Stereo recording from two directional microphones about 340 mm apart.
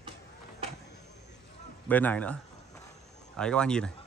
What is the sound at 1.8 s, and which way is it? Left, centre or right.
Speech, centre.